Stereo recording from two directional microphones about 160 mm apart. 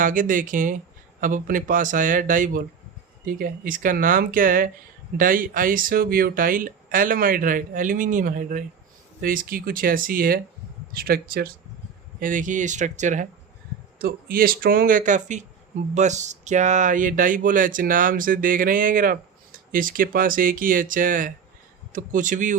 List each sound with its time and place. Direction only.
0.0 s speech: 55° right (ahead or behind)
12.2 s speech: 55° right (ahead or behind)
14.0 s speech: 65° right (ahead or behind)